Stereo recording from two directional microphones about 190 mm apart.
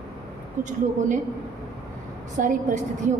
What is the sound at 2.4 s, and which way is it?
Speech, 45° right (ahead or behind).